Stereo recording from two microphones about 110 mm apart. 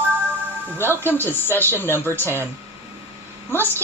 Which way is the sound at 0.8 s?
20° left (ahead or behind).